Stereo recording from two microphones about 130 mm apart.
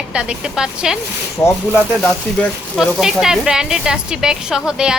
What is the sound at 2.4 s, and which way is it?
Speech, centre (ahead or behind).